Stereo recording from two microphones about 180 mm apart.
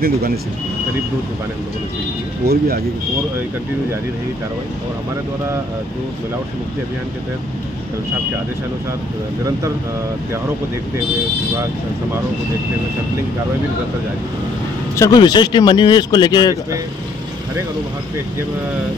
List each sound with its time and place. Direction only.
2.4 s speech: 60° right (ahead or behind)
15.0 s speech: 20° left (ahead or behind)